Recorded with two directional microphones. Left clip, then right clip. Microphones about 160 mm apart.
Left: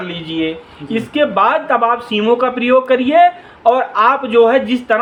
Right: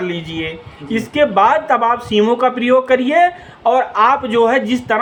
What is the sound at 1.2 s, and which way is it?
A man's voice, 30° right (ahead or behind).